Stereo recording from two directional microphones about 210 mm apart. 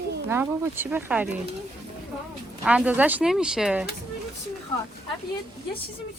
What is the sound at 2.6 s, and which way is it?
Speech, 5° right (ahead or behind).